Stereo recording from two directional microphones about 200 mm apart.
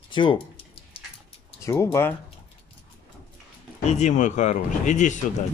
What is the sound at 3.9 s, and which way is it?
Speech, 35° left (ahead or behind).